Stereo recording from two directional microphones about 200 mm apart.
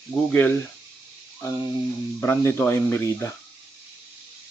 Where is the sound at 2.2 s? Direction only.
15° left (ahead or behind).